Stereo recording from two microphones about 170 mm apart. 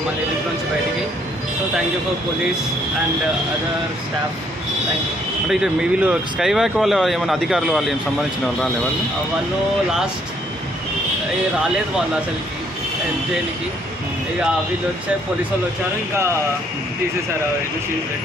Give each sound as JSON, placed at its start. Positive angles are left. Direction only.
{"t": 5.5, "sound": "speech", "side_deg": -5}